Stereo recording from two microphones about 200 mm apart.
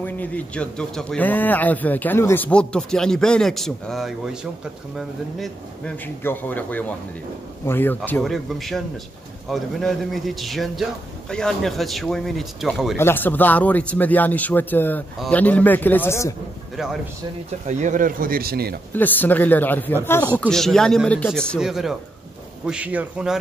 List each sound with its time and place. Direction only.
0.0 s a man's voice: 5° left (ahead or behind)
12.9 s speech: 10° left (ahead or behind)
16.7 s a man's voice: centre (ahead or behind)
17.6 s speech: 35° right (ahead or behind)
18.9 s a man's voice: 10° left (ahead or behind)